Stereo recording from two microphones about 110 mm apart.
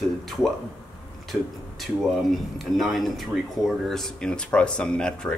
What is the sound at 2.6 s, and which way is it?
Speech, centre (ahead or behind).